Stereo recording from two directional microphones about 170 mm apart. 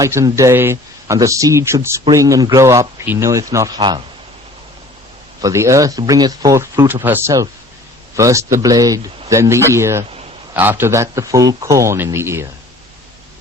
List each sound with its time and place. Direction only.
0.0 s speech: 20° right (ahead or behind)
5.4 s speech: 20° right (ahead or behind)